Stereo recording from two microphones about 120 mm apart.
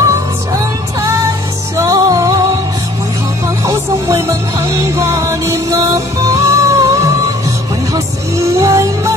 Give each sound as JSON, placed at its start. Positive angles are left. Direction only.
{"t": 1.8, "sound": "music", "side_deg": -30}
{"t": 3.4, "sound": "music", "side_deg": -25}